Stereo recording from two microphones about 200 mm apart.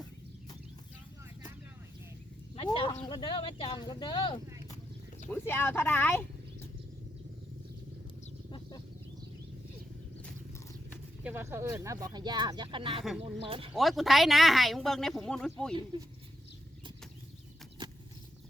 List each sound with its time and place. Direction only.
2.6 s sheep: 25° left (ahead or behind)
3.1 s speech: 25° left (ahead or behind)
5.3 s speech: 10° left (ahead or behind)
8.4 s a sound: 25° left (ahead or behind)
11.2 s speech: 10° right (ahead or behind); by 13.7 s 25° right (ahead or behind)
13.7 s speech: centre (ahead or behind)
15.7 s speech: 25° right (ahead or behind)
17.8 s a sound: 25° right (ahead or behind)